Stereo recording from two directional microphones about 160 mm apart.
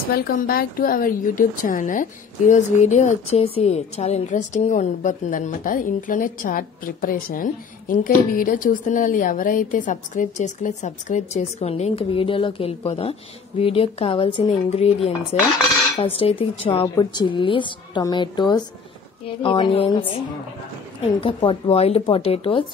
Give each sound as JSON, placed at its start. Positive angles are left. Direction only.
{"t": 0.1, "sound": "a woman's voice", "side_deg": 65}
{"t": 16.8, "sound": "a woman's voice", "side_deg": 25}